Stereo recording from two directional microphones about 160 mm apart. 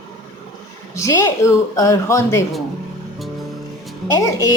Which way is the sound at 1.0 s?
20° left (ahead or behind).